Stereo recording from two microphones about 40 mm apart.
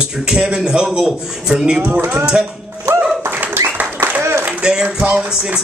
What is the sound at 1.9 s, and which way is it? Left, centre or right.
Speech, right.